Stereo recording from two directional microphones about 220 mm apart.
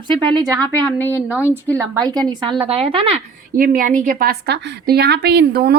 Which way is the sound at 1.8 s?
20° right (ahead or behind).